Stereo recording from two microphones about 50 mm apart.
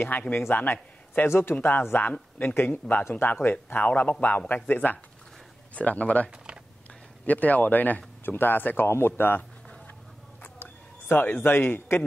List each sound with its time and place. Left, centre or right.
0.1 s speech: left
1.2 s speech: left
1.5 s speech: left
6.3 s typing: centre
7.2 s speech: left
10.4 s a sound: left